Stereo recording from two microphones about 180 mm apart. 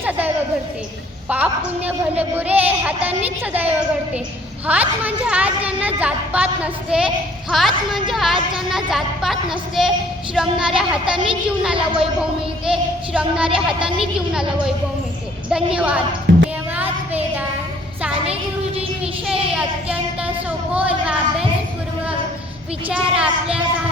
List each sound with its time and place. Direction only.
1.3 s a woman's voice: 10° right (ahead or behind)
15.4 s a woman's voice: 5° right (ahead or behind)
16.3 s music: 90° right
16.7 s child singing: 10° right (ahead or behind)
19.3 s child singing: 5° right (ahead or behind)
20.7 s a sound: 5° right (ahead or behind)
22.9 s a woman's voice: 5° right (ahead or behind)